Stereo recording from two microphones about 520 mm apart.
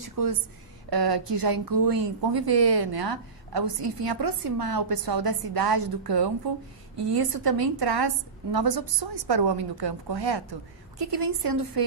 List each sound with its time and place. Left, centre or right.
0.9 s a woman's voice: right